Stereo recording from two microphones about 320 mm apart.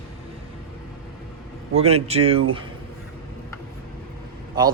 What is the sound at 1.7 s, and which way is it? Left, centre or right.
Speech, centre.